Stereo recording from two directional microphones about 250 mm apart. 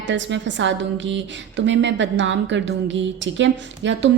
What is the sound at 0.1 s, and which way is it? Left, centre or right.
A woman's voice, right.